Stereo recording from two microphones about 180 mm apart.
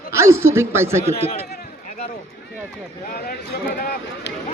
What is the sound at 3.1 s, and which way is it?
Speech, 55° left (ahead or behind).